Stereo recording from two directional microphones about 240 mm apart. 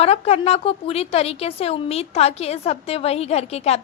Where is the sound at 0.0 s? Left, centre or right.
Left.